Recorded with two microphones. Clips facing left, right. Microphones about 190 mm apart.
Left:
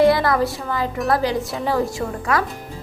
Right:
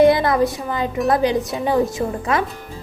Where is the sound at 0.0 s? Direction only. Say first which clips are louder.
Right 2 dB; 20° right (ahead or behind).